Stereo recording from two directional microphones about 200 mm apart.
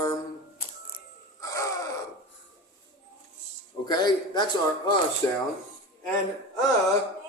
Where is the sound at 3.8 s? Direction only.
20° left (ahead or behind).